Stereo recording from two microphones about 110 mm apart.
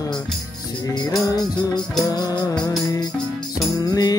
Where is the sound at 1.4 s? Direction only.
40° left (ahead or behind).